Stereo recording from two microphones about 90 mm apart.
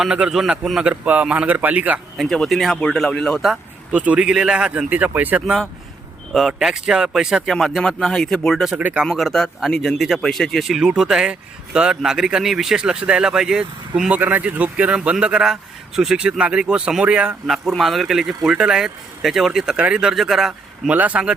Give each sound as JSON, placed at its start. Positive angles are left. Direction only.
{"t": 0.0, "sound": "speech", "side_deg": -10}
{"t": 2.1, "sound": "speech", "side_deg": 5}
{"t": 3.9, "sound": "speech", "side_deg": -15}
{"t": 6.3, "sound": "speech", "side_deg": -5}
{"t": 8.6, "sound": "speech", "side_deg": -15}
{"t": 9.0, "sound": "speech", "side_deg": 5}
{"t": 17.4, "sound": "speech", "side_deg": 0}
{"t": 20.9, "sound": "speech", "side_deg": -15}